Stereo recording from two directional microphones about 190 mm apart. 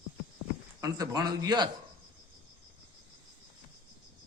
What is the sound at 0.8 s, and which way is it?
Speech, 20° right (ahead or behind).